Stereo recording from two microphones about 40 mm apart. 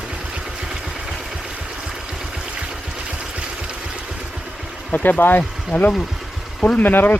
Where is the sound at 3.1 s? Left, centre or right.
Right.